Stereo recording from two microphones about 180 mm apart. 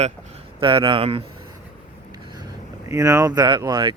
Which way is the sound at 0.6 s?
25° right (ahead or behind).